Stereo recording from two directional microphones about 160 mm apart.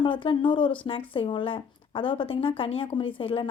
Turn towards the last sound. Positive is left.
turn(degrees=35)  # may be behind; listen again after turning